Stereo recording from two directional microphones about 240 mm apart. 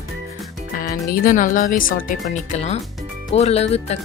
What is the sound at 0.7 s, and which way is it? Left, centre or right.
Speech, left.